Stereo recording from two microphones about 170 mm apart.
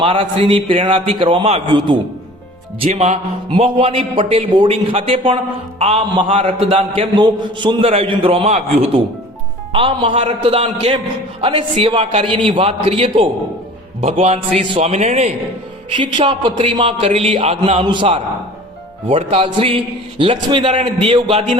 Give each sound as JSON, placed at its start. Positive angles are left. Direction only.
{"t": 0.0, "sound": "a man's voice", "side_deg": -30}
{"t": 2.8, "sound": "a man's voice", "side_deg": -40}
{"t": 15.9, "sound": "a man's voice", "side_deg": -30}